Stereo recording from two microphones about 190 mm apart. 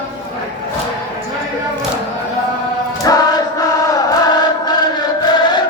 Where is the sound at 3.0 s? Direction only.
20° left (ahead or behind).